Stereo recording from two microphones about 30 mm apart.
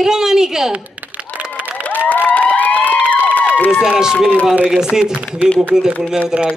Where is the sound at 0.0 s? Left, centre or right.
Centre.